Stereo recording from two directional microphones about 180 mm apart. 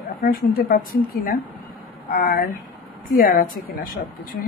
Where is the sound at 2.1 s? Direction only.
50° left (ahead or behind).